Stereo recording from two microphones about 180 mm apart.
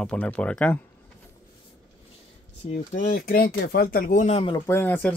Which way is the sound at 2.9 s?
50° left (ahead or behind).